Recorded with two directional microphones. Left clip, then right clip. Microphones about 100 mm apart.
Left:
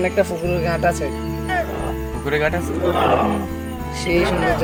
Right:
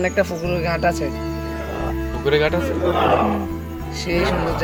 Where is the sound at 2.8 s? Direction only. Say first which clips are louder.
Left 1 dB; centre (ahead or behind).